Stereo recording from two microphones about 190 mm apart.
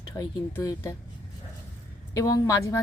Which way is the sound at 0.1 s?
15° left (ahead or behind).